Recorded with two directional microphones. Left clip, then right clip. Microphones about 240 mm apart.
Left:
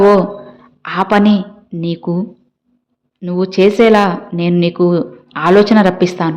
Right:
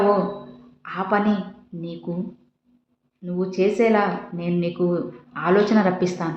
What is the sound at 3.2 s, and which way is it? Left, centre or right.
A woman's voice, left.